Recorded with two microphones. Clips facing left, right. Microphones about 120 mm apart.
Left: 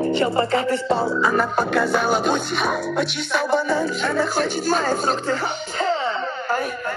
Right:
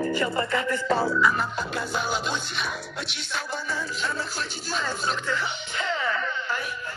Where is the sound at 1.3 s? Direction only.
50° left (ahead or behind).